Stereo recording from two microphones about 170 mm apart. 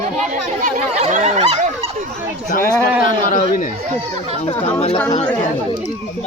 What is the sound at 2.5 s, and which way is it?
A man's voice, 55° left (ahead or behind).